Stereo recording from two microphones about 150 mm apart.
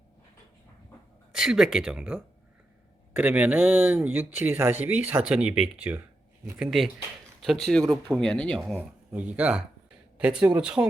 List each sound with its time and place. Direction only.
1.3 s speech: 5° right (ahead or behind)
9.1 s speech: 10° right (ahead or behind)